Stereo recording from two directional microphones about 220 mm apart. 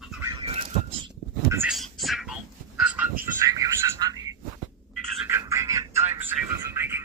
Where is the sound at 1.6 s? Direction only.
Centre (ahead or behind).